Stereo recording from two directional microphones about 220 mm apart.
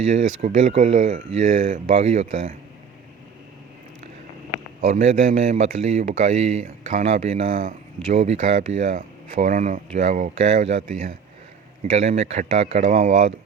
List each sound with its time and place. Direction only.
0.1 s speech: 30° right (ahead or behind)
4.8 s speech: 30° right (ahead or behind)